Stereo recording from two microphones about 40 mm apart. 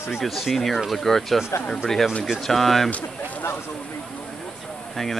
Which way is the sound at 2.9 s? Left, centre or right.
Left.